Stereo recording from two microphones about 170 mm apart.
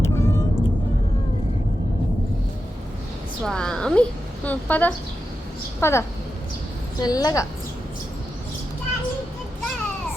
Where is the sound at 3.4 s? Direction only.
5° left (ahead or behind).